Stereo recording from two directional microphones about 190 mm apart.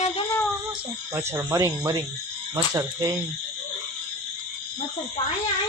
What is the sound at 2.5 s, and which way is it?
Cricket, 15° right (ahead or behind).